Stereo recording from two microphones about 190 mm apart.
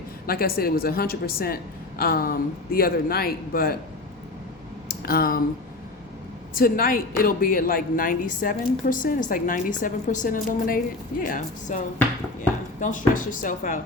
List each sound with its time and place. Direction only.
0.3 s a woman's voice: 50° left (ahead or behind)
4.9 s speech: 50° left (ahead or behind)
6.6 s a woman's voice: 50° left (ahead or behind)